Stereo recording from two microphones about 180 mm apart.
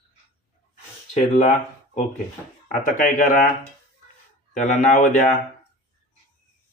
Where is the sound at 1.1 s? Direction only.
40° left (ahead or behind).